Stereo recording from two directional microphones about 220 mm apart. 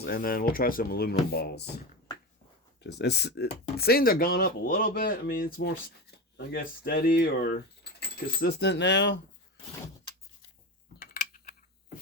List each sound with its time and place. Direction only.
0.0 s speech: 40° left (ahead or behind)
2.8 s speech: 50° left (ahead or behind)
11.0 s a sound: 40° left (ahead or behind)